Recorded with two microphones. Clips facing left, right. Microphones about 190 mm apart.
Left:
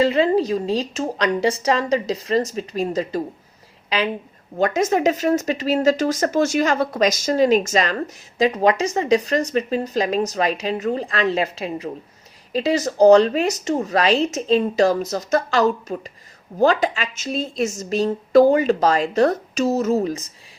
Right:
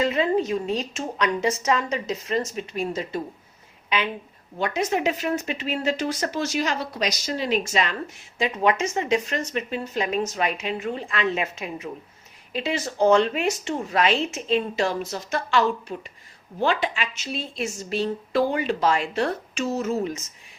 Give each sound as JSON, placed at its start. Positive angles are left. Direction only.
{"t": 0.0, "sound": "a woman's voice", "side_deg": 30}